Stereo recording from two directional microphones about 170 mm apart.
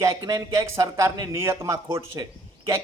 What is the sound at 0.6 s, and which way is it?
A man's voice, 20° right (ahead or behind).